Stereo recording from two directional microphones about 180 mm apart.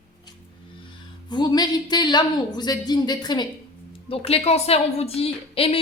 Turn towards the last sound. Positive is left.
turn(degrees=30)  # may be behind; listen again after turning